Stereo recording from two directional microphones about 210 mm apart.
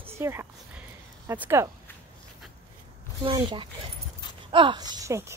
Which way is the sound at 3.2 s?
20° right (ahead or behind).